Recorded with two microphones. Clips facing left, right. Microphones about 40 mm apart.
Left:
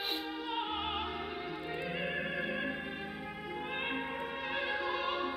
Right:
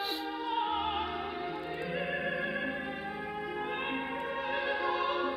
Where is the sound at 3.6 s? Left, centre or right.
Centre.